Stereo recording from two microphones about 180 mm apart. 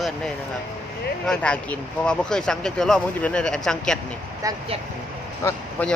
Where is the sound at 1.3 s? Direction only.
5° left (ahead or behind).